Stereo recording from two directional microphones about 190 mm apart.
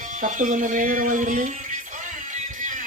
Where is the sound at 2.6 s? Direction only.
40° right (ahead or behind).